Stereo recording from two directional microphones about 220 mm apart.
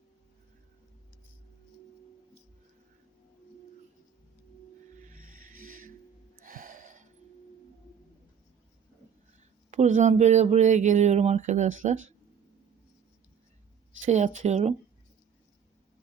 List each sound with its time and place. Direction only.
4.9 s music: 35° right (ahead or behind)
6.4 s gasp: 40° right (ahead or behind)
9.7 s speech: 30° right (ahead or behind)
14.0 s speech: 30° right (ahead or behind)